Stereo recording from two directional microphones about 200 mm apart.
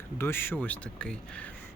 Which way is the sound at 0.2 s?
10° left (ahead or behind).